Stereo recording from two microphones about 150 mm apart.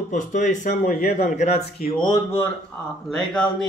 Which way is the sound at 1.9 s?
30° left (ahead or behind).